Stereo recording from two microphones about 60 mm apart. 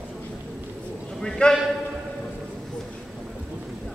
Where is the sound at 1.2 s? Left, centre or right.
Centre.